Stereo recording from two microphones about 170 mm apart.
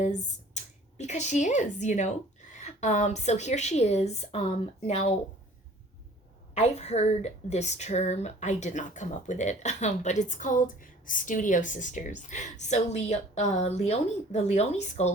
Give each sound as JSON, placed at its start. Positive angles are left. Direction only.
{"t": 0.0, "sound": "a woman's voice", "side_deg": 45}
{"t": 6.5, "sound": "a woman's voice", "side_deg": 40}